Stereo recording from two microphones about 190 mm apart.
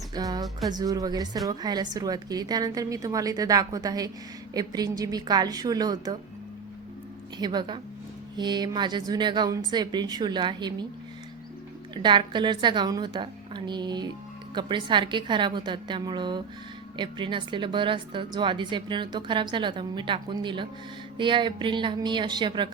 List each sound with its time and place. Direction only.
0.1 s a woman's voice: 20° right (ahead or behind)
7.3 s a woman's voice: 20° right (ahead or behind)
12.0 s a woman's voice: 25° right (ahead or behind)